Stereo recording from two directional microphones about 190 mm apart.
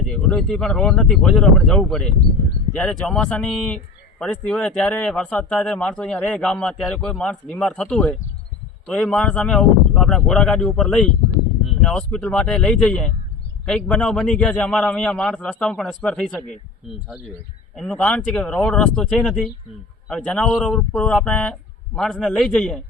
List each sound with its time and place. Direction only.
0.1 s a man's voice: 5° left (ahead or behind)